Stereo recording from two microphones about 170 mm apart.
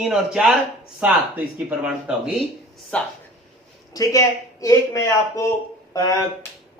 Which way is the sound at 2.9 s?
5° left (ahead or behind).